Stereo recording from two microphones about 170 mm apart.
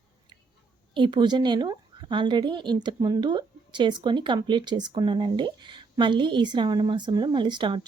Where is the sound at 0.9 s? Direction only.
30° right (ahead or behind).